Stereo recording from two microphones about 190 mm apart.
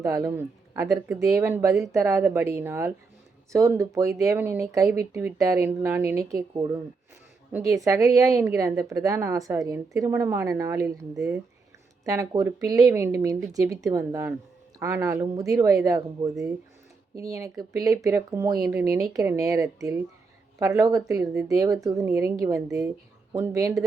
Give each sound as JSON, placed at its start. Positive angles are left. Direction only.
{"t": 0.0, "sound": "speech", "side_deg": -15}
{"t": 7.9, "sound": "speech", "side_deg": -15}
{"t": 12.0, "sound": "speech", "side_deg": -15}